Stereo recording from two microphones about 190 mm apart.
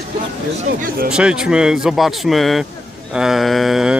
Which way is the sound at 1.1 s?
5° right (ahead or behind).